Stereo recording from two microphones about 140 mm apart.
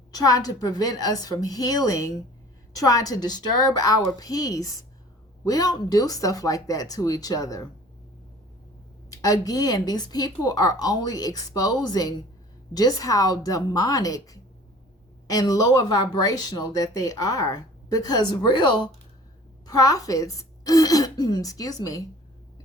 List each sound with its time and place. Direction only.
0.1 s a woman's voice: 25° left (ahead or behind)
9.0 s a woman's voice: 25° left (ahead or behind)